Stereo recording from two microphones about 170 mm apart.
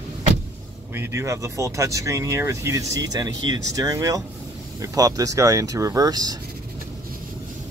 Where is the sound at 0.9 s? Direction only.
15° right (ahead or behind).